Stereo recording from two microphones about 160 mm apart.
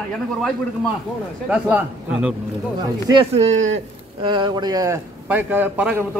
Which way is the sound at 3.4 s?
45° right (ahead or behind).